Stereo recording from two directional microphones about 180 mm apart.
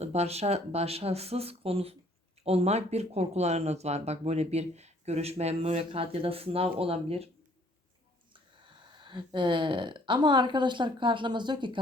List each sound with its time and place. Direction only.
0.0 s speech: 35° right (ahead or behind)
9.0 s speech: 25° right (ahead or behind)